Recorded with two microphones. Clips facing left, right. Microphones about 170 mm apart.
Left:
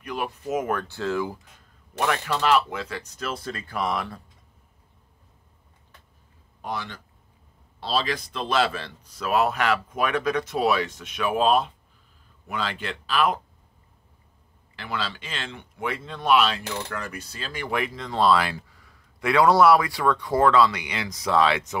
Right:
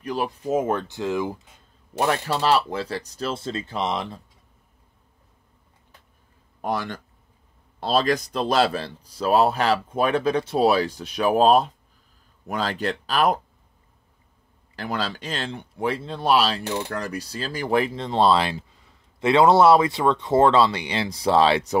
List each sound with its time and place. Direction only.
0.0 s a sound: 35° right (ahead or behind)
0.4 s speech: 25° right (ahead or behind)
2.0 s speech: 30° right (ahead or behind)
6.6 s speech: 50° right (ahead or behind)
14.8 s speech: 40° right (ahead or behind)